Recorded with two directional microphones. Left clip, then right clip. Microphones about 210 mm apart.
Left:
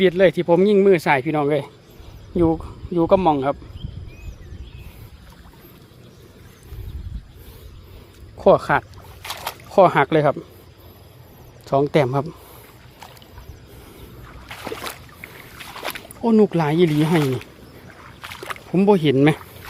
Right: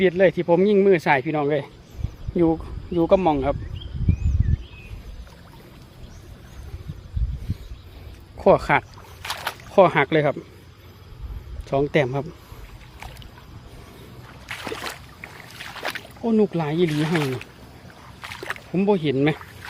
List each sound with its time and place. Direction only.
0.0 s speech: 15° left (ahead or behind)
8.4 s speech: centre (ahead or behind)
9.2 s a sound: 15° left (ahead or behind)
11.6 s speech: 15° left (ahead or behind)
14.4 s boat: 10° left (ahead or behind)
16.2 s speech: 30° left (ahead or behind)
17.2 s speech: 5° left (ahead or behind)
18.2 s rowboat: centre (ahead or behind)
18.7 s speech: 30° left (ahead or behind)